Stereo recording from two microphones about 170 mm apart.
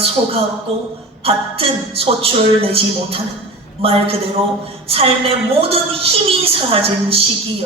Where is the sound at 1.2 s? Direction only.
35° right (ahead or behind).